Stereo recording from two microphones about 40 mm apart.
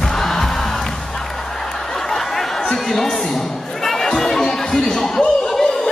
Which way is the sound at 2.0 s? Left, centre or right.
Centre.